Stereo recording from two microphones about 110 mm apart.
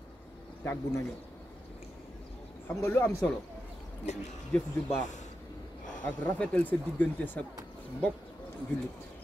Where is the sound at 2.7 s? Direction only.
25° left (ahead or behind).